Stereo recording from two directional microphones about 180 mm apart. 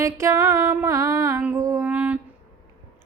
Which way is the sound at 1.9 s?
5° right (ahead or behind).